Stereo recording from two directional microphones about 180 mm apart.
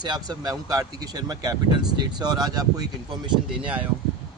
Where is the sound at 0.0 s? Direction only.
25° right (ahead or behind).